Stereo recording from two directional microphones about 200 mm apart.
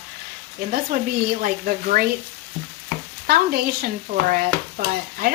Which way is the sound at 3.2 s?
45° right (ahead or behind).